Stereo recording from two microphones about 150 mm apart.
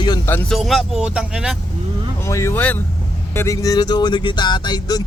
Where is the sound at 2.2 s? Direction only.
20° left (ahead or behind).